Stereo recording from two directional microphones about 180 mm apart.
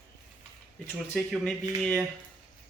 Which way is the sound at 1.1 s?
Centre (ahead or behind).